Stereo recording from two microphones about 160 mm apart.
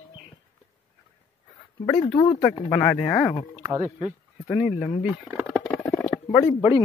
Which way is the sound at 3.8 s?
10° right (ahead or behind).